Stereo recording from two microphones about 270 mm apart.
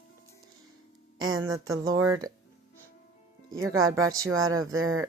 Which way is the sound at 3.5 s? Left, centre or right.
Centre.